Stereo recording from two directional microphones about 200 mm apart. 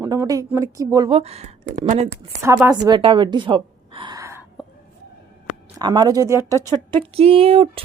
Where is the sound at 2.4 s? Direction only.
15° right (ahead or behind).